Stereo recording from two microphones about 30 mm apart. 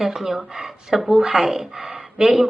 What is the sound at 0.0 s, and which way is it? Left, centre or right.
Speech, centre.